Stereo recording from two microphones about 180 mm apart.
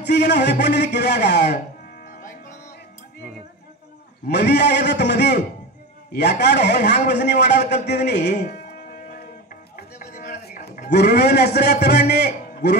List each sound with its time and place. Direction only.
0.0 s a man's voice: 70° left (ahead or behind)
4.3 s a man's voice: 65° left (ahead or behind)
6.4 s a man's voice: 70° left (ahead or behind)
9.9 s a sound: 45° left (ahead or behind)
10.9 s a man's voice: 65° left (ahead or behind)